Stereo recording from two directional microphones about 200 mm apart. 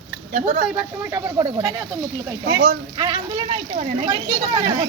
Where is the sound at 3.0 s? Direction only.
20° right (ahead or behind).